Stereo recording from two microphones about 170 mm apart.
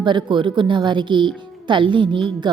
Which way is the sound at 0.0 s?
30° right (ahead or behind).